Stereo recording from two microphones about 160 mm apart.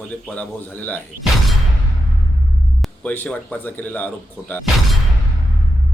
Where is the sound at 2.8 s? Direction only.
10° left (ahead or behind).